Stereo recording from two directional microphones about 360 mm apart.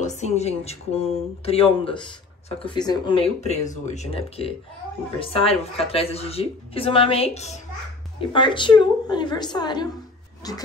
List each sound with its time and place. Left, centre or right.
0.0 s a woman's voice: centre